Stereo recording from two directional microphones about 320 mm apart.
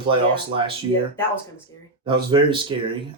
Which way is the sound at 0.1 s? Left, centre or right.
Centre.